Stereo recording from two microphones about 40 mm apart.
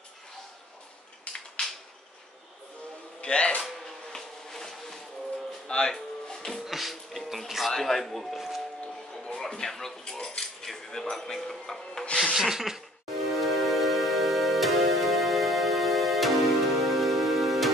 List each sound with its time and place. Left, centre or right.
3.2 s speech: left
3.6 s a sound: centre
5.7 s music: centre
6.6 s music: centre
7.7 s speech: centre
9.3 s speech: centre
12.4 s a sound: centre
13.4 s music: centre